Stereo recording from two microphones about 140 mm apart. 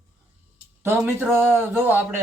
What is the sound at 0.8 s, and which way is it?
A man's voice, 15° right (ahead or behind).